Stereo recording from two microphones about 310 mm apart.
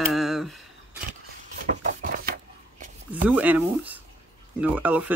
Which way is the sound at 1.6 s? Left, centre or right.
Right.